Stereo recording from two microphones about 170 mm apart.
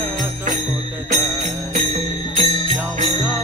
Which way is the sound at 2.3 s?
40° right (ahead or behind).